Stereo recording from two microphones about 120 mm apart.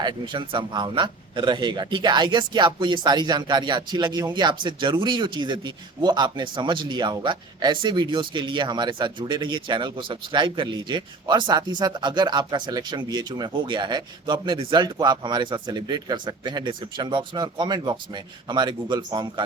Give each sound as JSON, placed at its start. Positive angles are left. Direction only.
{"t": 0.0, "sound": "speech", "side_deg": -40}